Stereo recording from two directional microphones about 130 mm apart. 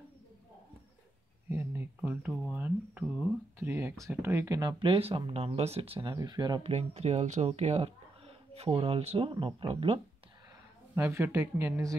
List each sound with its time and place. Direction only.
1.5 s speech: 20° right (ahead or behind)
4.6 s speech: 35° right (ahead or behind)
5.9 s speech: 30° right (ahead or behind)
6.6 s speech: 50° right (ahead or behind)
11.0 s speech: 20° right (ahead or behind)